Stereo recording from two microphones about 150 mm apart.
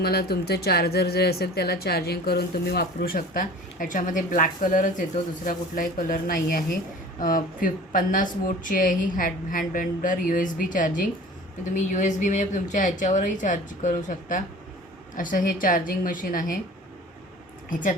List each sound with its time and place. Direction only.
0.0 s speech: 90° left; by 16.6 s 70° left (ahead or behind)
17.7 s a woman's voice: 60° left (ahead or behind)